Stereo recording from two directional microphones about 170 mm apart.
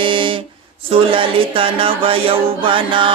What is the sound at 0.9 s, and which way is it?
Mantra, 30° right (ahead or behind).